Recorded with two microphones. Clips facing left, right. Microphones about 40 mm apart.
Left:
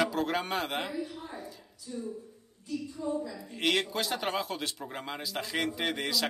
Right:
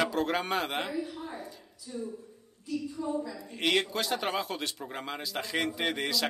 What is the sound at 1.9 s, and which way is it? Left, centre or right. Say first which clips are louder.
A woman's voice: even; right.